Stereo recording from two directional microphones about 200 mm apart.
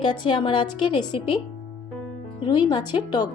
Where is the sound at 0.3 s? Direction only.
25° left (ahead or behind).